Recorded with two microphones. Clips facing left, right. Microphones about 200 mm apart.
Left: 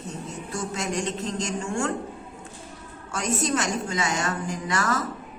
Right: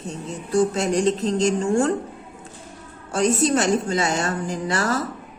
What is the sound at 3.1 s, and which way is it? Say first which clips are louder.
A woman's voice: right 7 dB; 30° right (ahead or behind).